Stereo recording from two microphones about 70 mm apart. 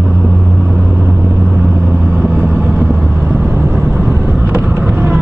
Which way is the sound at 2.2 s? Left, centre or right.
Centre.